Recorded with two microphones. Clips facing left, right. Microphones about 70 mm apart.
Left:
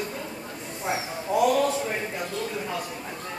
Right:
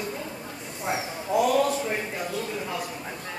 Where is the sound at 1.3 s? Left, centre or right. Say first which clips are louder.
Left 1 dB; centre.